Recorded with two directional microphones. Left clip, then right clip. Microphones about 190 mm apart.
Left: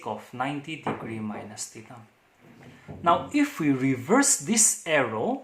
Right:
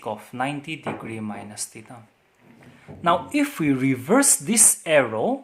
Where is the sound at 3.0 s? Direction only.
40° right (ahead or behind).